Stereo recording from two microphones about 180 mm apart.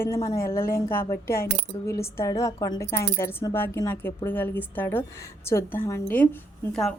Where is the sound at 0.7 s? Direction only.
15° left (ahead or behind).